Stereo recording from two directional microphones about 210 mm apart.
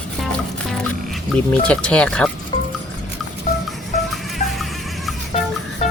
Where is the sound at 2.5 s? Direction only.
25° left (ahead or behind).